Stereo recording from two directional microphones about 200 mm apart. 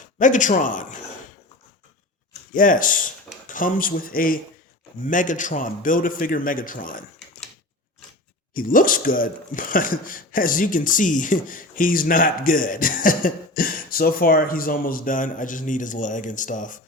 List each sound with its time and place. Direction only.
0.2 s speech: 40° left (ahead or behind)
2.5 s speech: 45° left (ahead or behind)
8.5 s speech: 45° left (ahead or behind)